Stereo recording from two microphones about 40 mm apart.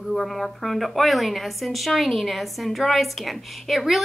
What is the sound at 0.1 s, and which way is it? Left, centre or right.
A woman's voice, centre.